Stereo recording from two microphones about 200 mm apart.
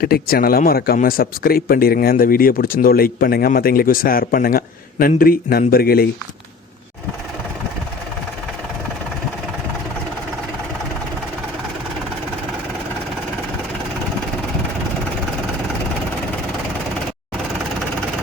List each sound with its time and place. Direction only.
0.0 s speech: 50° left (ahead or behind)